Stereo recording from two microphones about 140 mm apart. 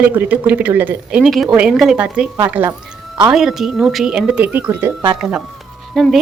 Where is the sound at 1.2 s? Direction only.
Centre (ahead or behind).